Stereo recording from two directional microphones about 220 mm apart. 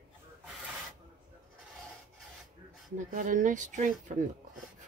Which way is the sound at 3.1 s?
35° right (ahead or behind).